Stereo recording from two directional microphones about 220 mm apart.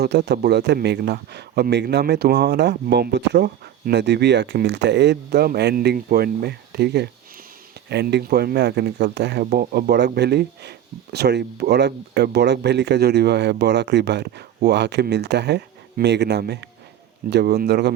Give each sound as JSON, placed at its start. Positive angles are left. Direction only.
{"t": 0.0, "sound": "speech", "side_deg": -50}